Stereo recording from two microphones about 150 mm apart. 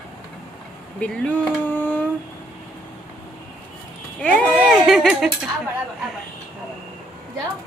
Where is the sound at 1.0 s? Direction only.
10° left (ahead or behind).